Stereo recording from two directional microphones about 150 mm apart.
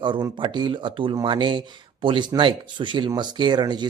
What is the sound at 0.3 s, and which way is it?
Speech, 30° right (ahead or behind).